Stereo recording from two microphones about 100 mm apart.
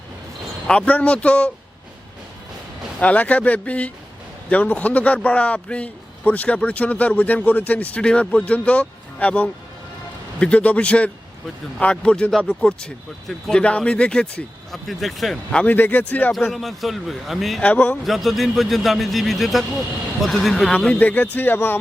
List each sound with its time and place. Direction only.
0.7 s a man's voice: 15° left (ahead or behind)
3.0 s a man's voice: 15° left (ahead or behind)
14.7 s speech: centre (ahead or behind)
15.6 s a man's voice: 20° left (ahead or behind)
16.5 s speech: centre (ahead or behind)
17.6 s a man's voice: 15° left (ahead or behind)
18.0 s a man's voice: centre (ahead or behind); by 21.8 s 20° left (ahead or behind)